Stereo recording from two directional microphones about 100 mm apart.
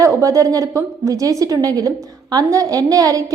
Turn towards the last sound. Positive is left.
turn(degrees=-35)  # may be behind; listen again after turning